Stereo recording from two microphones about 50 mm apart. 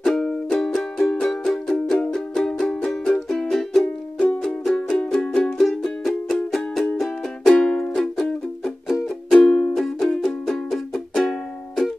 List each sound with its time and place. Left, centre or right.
0.0 s music: centre